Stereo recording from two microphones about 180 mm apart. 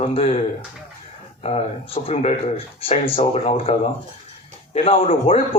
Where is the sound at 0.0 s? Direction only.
35° left (ahead or behind).